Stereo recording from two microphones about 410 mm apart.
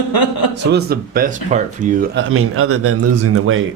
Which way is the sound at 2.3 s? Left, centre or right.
Right.